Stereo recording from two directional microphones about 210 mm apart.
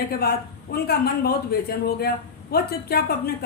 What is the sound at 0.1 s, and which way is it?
A woman's voice, 45° left (ahead or behind).